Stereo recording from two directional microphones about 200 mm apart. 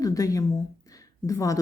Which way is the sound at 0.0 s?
15° left (ahead or behind).